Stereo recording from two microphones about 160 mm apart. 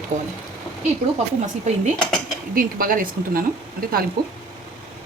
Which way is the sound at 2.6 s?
60° right (ahead or behind).